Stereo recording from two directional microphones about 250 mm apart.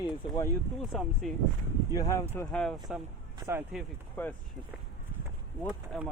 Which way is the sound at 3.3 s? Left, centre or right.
Centre.